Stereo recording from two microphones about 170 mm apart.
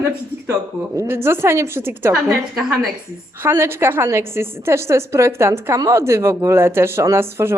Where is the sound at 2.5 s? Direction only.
Centre (ahead or behind).